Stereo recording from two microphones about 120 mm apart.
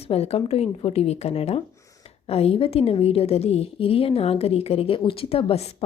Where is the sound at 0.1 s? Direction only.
60° left (ahead or behind).